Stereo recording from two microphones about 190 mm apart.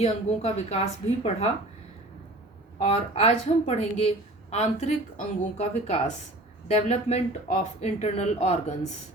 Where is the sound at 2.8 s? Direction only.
30° left (ahead or behind).